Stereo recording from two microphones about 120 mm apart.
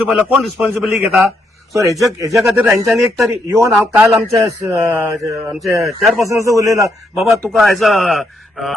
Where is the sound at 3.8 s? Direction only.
15° right (ahead or behind).